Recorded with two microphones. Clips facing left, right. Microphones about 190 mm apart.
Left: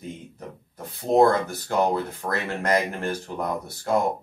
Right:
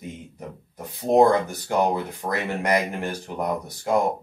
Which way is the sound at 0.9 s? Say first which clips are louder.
Right 1 dB; 15° right (ahead or behind).